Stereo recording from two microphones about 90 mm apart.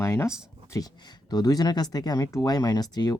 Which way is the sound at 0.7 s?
45° left (ahead or behind).